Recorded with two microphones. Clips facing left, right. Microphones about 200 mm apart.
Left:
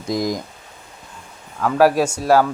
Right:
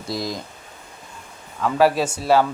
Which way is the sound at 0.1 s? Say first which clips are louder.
Left 6 dB; 20° left (ahead or behind).